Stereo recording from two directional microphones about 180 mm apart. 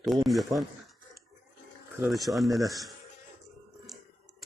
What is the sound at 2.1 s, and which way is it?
Speech, centre (ahead or behind).